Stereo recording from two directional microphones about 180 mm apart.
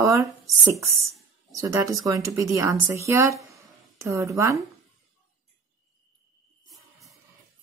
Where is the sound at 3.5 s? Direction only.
15° right (ahead or behind).